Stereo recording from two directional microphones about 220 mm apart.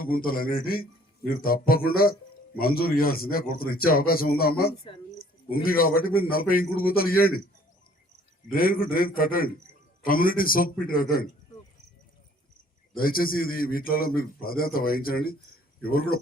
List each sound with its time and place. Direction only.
0.0 s a man's voice: 40° left (ahead or behind)
5.1 s a sound: 40° left (ahead or behind)
5.6 s a man's voice: 40° left (ahead or behind)
8.4 s a man's voice: 40° left (ahead or behind)
13.0 s a man's voice: 40° left (ahead or behind)